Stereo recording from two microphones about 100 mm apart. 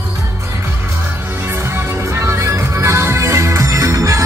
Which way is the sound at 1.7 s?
25° right (ahead or behind).